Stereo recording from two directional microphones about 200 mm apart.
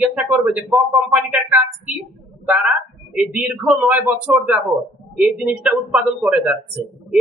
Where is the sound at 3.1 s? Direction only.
5° right (ahead or behind).